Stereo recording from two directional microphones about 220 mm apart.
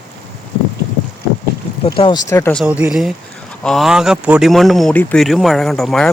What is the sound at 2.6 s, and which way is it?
Speech, 5° right (ahead or behind).